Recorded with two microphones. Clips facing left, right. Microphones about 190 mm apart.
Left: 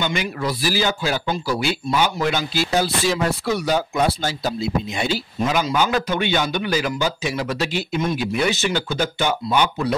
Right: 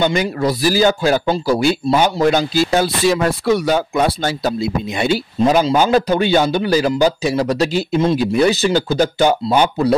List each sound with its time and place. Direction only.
0.0 s a man's voice: 40° right (ahead or behind)
2.7 s speech: 60° right (ahead or behind)
5.4 s a man's voice: 35° right (ahead or behind)